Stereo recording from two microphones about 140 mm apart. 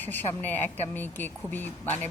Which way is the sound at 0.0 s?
15° left (ahead or behind).